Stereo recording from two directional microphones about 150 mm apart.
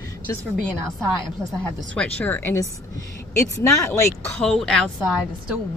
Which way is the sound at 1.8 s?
10° left (ahead or behind).